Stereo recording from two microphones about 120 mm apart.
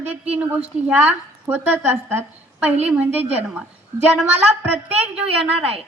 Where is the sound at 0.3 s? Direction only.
15° right (ahead or behind).